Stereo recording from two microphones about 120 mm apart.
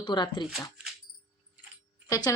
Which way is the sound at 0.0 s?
40° left (ahead or behind).